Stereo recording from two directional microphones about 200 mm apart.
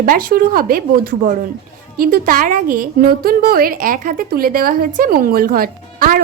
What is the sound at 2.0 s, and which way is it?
A woman's voice, 45° right (ahead or behind).